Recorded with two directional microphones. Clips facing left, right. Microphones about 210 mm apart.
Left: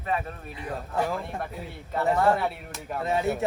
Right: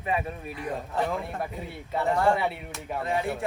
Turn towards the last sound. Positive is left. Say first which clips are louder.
# left 2 dB
turn(degrees=20)  # may be behind; listen again after turning